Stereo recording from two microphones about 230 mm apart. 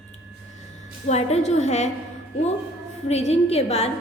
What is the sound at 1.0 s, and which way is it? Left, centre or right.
Speech, left.